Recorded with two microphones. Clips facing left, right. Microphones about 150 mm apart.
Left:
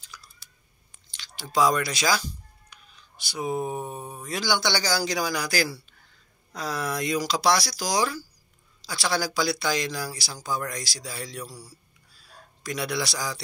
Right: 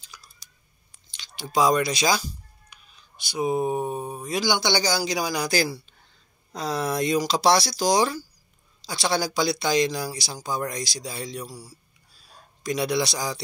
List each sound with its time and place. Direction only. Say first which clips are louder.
0.1 s typing: left 1 dB; 15° right (ahead or behind)
1.1 s a sound: right 1 dB; 20° right (ahead or behind)
3.3 s speech: right 5 dB; 15° right (ahead or behind)